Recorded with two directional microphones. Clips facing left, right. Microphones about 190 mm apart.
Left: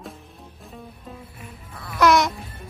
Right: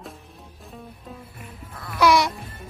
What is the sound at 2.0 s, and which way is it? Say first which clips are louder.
Music: left 1 dB; 10° right (ahead or behind).